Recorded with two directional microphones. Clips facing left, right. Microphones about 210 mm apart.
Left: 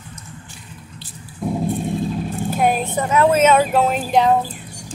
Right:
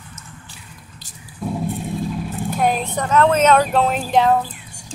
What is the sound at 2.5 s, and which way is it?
A woman's voice, 5° left (ahead or behind).